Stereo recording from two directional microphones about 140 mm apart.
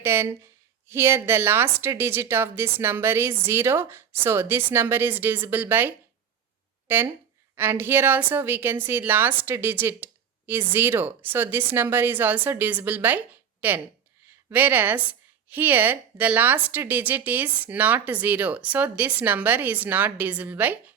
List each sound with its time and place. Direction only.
0.0 s a woman's voice: 15° right (ahead or behind)